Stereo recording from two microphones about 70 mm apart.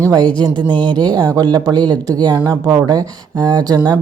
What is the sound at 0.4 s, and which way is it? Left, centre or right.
Speech, right.